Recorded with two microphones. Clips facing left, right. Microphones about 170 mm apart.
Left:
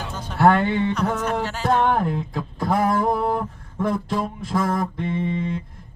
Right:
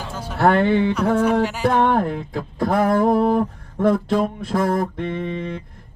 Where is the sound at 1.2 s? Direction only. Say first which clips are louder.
Right 6 dB; 10° right (ahead or behind).